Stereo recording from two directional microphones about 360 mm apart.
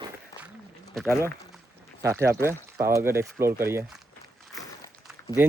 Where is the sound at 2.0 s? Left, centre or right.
Centre.